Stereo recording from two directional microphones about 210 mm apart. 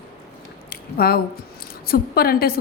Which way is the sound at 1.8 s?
45° left (ahead or behind).